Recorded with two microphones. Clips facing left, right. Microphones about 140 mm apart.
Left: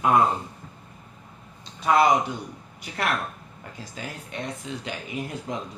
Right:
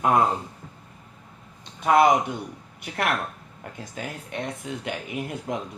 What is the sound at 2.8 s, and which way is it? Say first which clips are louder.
Speech: right 1 dB; 60° right (ahead or behind).